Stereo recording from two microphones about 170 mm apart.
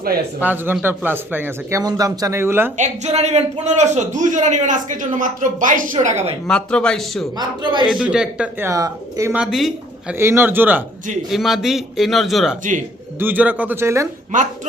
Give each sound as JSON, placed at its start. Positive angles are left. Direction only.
{"t": 0.4, "sound": "a man's voice", "side_deg": -10}
{"t": 2.7, "sound": "a man's voice", "side_deg": -45}
{"t": 6.5, "sound": "a man's voice", "side_deg": 5}
{"t": 7.3, "sound": "a man's voice", "side_deg": -25}
{"t": 7.9, "sound": "a man's voice", "side_deg": -5}
{"t": 9.3, "sound": "a man's voice", "side_deg": -5}
{"t": 10.2, "sound": "a man's voice", "side_deg": -15}
{"t": 13.1, "sound": "a man's voice", "side_deg": -10}
{"t": 14.3, "sound": "a man's voice", "side_deg": -50}